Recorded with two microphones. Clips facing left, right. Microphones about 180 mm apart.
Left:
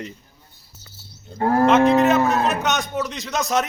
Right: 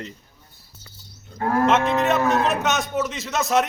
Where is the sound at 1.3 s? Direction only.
30° left (ahead or behind).